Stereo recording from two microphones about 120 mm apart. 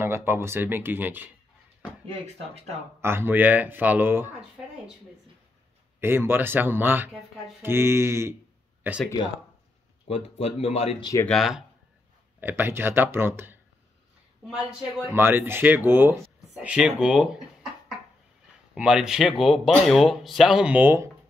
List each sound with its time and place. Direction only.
0.0 s speech: 20° right (ahead or behind)
3.0 s speech: 20° right (ahead or behind)
5.9 s speech: 20° right (ahead or behind)
10.0 s speech: 55° left (ahead or behind)
11.2 s speech: centre (ahead or behind)
12.4 s speech: 15° right (ahead or behind)
14.4 s speech: centre (ahead or behind)
15.1 s speech: 20° right (ahead or behind)
16.5 s speech: 5° right (ahead or behind)
18.8 s speech: 5° right (ahead or behind)